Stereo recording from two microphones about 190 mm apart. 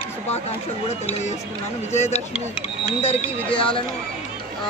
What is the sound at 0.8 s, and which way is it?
Speech, 35° left (ahead or behind).